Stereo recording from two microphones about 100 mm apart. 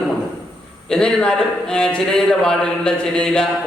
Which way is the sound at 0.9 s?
10° left (ahead or behind).